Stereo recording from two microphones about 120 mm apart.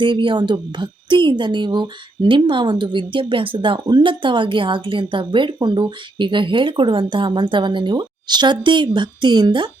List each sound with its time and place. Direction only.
0.0 s speech: 40° right (ahead or behind)